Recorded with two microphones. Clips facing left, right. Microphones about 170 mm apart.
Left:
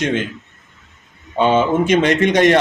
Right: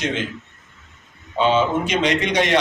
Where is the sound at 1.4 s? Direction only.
50° left (ahead or behind).